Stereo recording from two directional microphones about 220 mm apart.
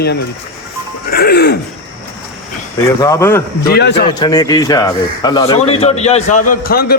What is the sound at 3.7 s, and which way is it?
Speech, 50° left (ahead or behind).